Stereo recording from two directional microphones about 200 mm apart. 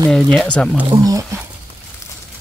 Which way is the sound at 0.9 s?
20° right (ahead or behind).